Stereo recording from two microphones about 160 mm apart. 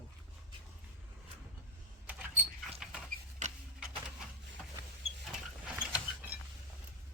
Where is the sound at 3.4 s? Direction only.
50° right (ahead or behind).